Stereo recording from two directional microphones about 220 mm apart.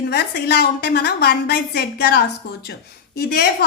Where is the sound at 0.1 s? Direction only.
45° left (ahead or behind).